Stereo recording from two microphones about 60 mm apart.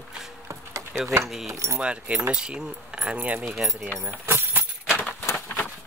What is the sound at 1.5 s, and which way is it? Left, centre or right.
Speech, right.